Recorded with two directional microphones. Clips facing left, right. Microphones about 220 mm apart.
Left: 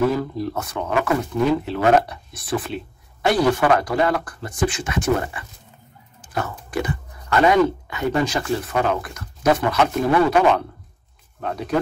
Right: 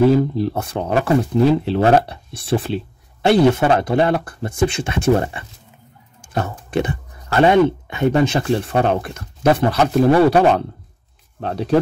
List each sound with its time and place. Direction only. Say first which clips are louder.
0.0 s speech: right 6 dB; 30° right (ahead or behind)